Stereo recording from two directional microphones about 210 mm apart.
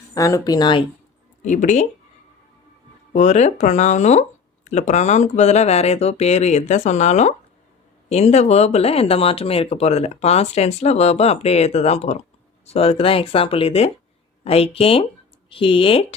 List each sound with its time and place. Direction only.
0.1 s speech: 15° left (ahead or behind)
1.4 s speech: 35° left (ahead or behind)
3.1 s speech: 35° left (ahead or behind)